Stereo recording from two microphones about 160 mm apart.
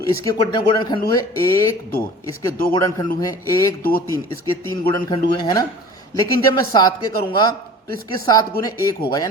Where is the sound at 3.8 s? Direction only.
65° left (ahead or behind).